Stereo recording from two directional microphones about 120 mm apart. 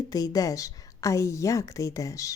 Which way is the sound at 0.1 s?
30° left (ahead or behind).